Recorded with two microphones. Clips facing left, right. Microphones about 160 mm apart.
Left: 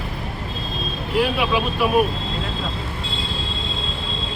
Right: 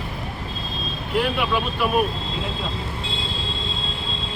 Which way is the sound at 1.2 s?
5° left (ahead or behind).